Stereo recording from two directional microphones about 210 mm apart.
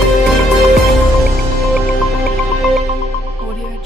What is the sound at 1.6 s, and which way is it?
Music, centre (ahead or behind).